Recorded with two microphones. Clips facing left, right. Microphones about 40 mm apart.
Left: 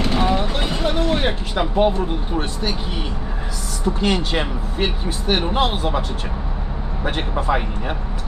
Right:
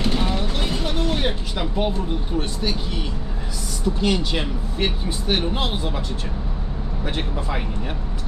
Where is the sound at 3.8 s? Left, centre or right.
Left.